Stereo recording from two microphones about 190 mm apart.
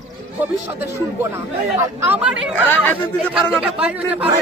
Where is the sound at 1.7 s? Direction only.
10° right (ahead or behind).